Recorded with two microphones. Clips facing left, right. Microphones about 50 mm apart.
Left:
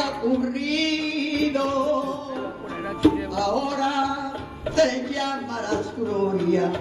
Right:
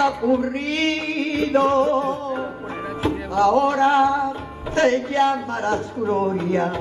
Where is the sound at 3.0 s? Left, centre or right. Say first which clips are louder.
Right 1 dB; right.